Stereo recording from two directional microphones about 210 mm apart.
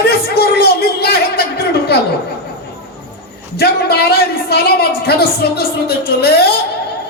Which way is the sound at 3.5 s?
50° left (ahead or behind).